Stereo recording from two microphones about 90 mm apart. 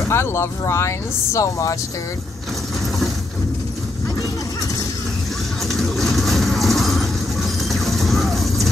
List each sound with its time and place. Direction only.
0.1 s speech: 30° left (ahead or behind)
5.7 s vehicle: centre (ahead or behind)